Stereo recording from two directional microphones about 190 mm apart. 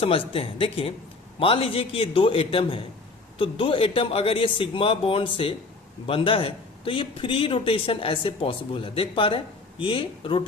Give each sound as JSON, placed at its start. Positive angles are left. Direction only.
{"t": 0.0, "sound": "a man's voice", "side_deg": 30}